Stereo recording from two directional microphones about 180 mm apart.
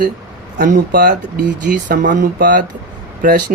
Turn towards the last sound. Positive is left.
turn(degrees=-50)  # may be behind; listen again after turning